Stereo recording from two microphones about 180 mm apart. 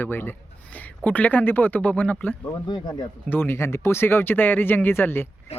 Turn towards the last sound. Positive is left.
turn(degrees=35)  # may be behind; listen again after turning